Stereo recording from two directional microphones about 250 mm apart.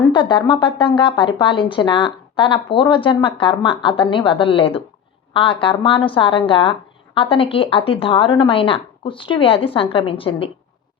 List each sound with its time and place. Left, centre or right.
0.1 s speech: centre